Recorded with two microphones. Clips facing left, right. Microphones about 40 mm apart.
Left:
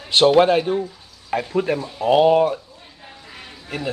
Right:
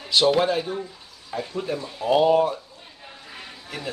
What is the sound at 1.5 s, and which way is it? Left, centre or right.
Speech, left.